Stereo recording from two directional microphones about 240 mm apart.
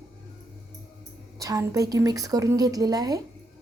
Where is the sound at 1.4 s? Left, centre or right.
Centre.